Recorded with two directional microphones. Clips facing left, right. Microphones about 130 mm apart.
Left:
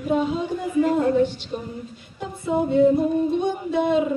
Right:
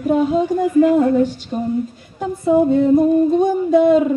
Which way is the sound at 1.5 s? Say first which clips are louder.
Right 7 dB; 45° right (ahead or behind).